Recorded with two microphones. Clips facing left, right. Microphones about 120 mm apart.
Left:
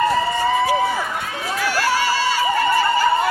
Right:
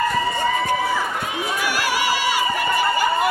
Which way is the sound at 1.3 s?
15° right (ahead or behind).